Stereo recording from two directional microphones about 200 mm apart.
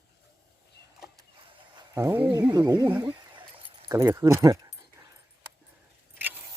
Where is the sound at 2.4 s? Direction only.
20° right (ahead or behind).